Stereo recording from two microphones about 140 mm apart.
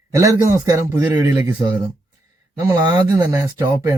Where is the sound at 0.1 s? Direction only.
20° right (ahead or behind).